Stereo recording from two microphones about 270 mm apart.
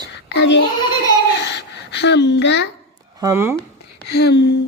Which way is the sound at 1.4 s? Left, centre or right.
Left.